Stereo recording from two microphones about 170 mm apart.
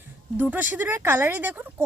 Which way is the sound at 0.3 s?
10° right (ahead or behind).